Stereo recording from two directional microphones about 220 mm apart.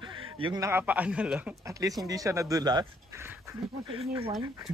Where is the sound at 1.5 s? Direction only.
15° right (ahead or behind).